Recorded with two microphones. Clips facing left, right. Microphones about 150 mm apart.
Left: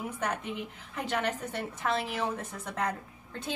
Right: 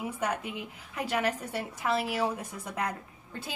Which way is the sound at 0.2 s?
10° right (ahead or behind).